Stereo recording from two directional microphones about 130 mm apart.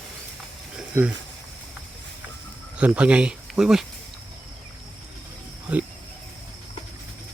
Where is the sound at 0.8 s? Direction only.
10° right (ahead or behind).